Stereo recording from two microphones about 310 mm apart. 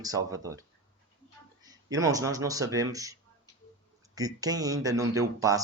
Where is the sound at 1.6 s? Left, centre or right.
Centre.